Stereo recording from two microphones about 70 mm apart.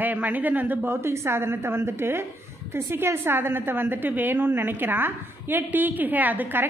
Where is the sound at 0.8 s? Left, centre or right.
Right.